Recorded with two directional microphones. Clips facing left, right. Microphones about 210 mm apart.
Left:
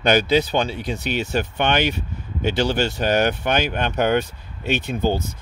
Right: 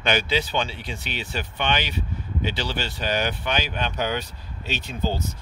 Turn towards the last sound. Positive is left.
turn(degrees=55)  # may be behind; listen again after turning